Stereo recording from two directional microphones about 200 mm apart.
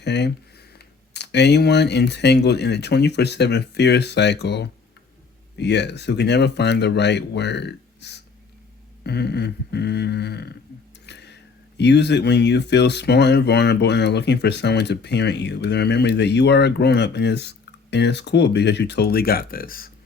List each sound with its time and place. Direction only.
0.0 s speech: 55° left (ahead or behind)
11.0 s a sound: 60° left (ahead or behind)
11.8 s speech: 60° left (ahead or behind)